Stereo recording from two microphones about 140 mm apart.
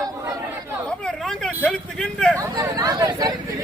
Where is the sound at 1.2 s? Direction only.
5° left (ahead or behind).